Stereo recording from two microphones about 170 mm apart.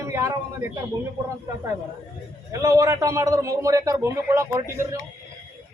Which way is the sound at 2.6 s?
20° right (ahead or behind).